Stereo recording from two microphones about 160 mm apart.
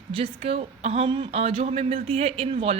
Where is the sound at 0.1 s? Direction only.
40° right (ahead or behind).